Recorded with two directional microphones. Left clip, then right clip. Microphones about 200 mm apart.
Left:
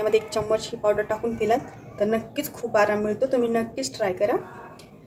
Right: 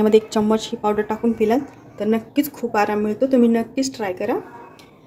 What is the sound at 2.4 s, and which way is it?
Speech, 45° right (ahead or behind).